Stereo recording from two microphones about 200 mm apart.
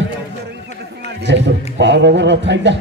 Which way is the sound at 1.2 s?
65° right (ahead or behind).